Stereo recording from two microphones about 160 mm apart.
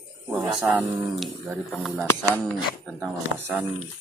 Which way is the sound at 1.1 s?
Centre (ahead or behind).